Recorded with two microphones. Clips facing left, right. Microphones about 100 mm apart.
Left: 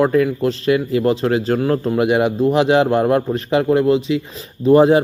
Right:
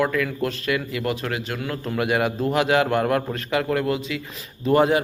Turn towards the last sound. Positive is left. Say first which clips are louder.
# left 7 dB
turn(degrees=30)  # may be behind; listen again after turning